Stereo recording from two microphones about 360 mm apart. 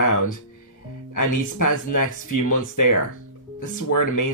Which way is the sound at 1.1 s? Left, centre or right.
Left.